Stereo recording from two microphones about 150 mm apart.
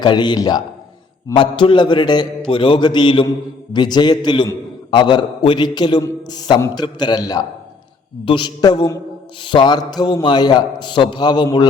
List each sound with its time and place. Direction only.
0.0 s a man's voice: 30° left (ahead or behind)